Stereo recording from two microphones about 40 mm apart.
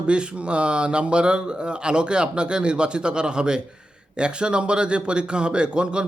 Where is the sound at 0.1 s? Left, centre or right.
Right.